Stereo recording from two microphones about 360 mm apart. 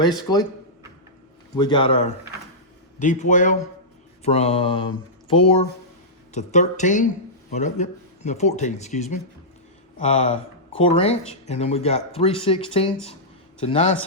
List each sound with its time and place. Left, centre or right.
0.0 s speech: centre
1.5 s speech: centre